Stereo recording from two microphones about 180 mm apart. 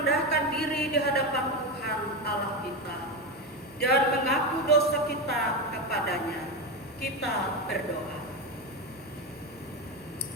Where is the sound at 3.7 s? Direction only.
60° left (ahead or behind).